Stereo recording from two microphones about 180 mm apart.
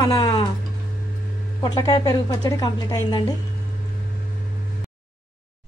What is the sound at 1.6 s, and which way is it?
A woman's voice, 20° left (ahead or behind).